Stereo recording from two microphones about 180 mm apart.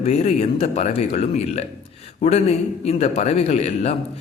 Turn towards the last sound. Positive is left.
turn(degrees=35)  # may be behind; listen again after turning